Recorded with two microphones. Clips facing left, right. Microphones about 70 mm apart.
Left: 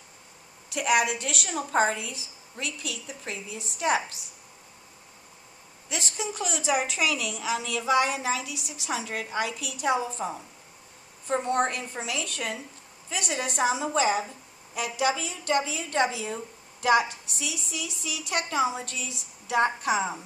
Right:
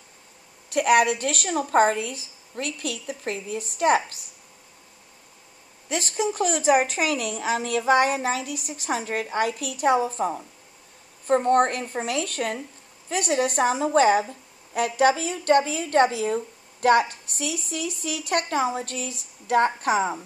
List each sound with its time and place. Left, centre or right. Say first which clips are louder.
0.7 s a woman's voice: right 6 dB; right
5.9 s a woman's voice: right 7 dB; right